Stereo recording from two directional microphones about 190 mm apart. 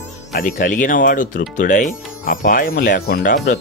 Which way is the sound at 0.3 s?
45° left (ahead or behind).